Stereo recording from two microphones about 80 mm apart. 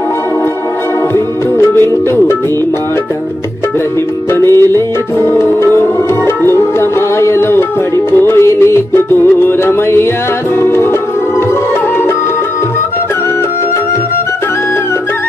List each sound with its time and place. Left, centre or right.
1.1 s music: left
4.3 s music: left